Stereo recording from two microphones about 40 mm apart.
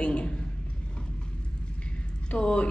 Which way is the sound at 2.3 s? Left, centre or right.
Left.